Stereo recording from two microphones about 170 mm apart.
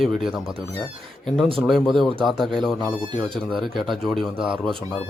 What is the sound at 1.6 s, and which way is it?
A man's voice, centre (ahead or behind).